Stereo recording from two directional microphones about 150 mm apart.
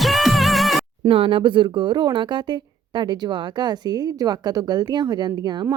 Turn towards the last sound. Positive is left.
turn(degrees=-30)  # may be behind; listen again after turning